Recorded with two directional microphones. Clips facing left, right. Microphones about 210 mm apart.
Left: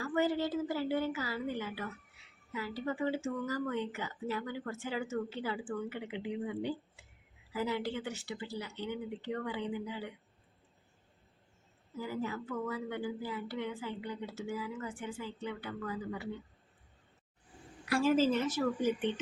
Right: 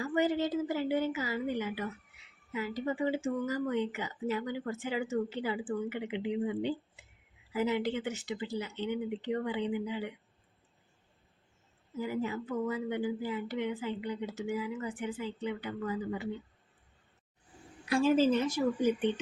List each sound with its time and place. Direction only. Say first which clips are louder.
0.0 s speech: right 2 dB; 15° right (ahead or behind)
11.9 s speech: right 3 dB; 20° right (ahead or behind)
17.8 s speech: right 2 dB; 20° right (ahead or behind)